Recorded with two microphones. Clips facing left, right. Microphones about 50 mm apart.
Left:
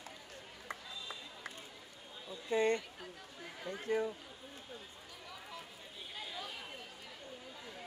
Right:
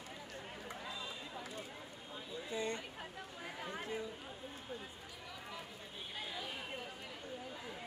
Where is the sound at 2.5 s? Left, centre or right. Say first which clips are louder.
Left 9 dB; left.